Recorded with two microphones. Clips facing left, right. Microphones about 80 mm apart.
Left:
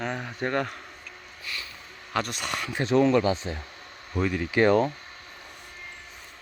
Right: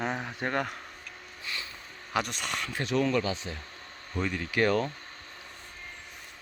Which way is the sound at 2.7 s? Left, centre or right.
Left.